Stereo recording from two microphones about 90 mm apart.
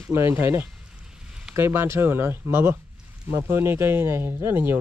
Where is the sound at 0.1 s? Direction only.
30° right (ahead or behind).